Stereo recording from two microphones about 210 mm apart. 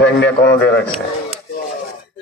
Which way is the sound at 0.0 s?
55° left (ahead or behind).